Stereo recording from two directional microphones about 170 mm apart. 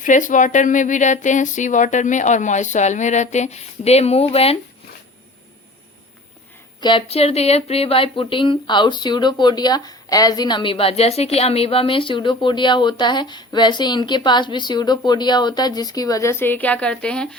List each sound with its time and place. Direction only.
0.0 s speech: 50° left (ahead or behind)
6.7 s speech: 25° left (ahead or behind); by 17.2 s 5° left (ahead or behind)